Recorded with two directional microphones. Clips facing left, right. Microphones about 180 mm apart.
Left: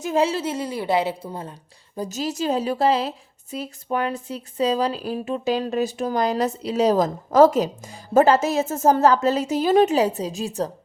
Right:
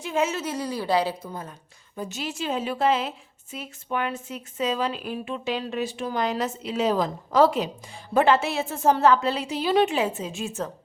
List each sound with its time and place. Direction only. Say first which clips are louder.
0.0 s a woman's voice: left 4 dB; 35° left (ahead or behind)